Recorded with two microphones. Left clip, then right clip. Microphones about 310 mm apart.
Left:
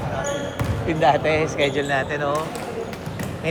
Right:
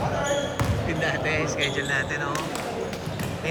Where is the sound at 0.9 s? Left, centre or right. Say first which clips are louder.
Left 10 dB; centre.